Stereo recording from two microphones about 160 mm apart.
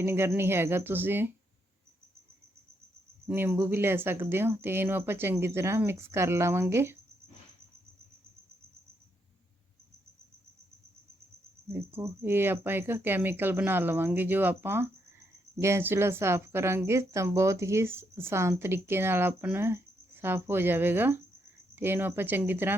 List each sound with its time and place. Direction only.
0.0 s speech: 15° right (ahead or behind)
3.2 s speech: 15° right (ahead or behind)
11.7 s speech: 15° right (ahead or behind)